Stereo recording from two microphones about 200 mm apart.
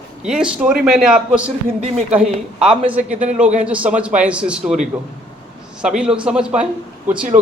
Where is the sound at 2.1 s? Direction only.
5° right (ahead or behind).